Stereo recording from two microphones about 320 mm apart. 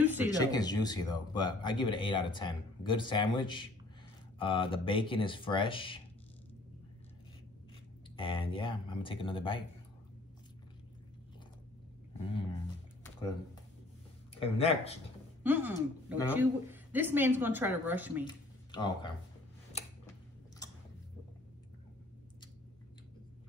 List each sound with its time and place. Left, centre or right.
0.0 s a sound: centre
0.4 s speech: centre
8.2 s speech: centre
12.2 s speech: centre
14.4 s speech: centre
15.4 s a woman's voice: centre
18.2 s speech: centre